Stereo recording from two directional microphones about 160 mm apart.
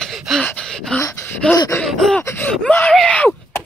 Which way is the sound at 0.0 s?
Centre (ahead or behind).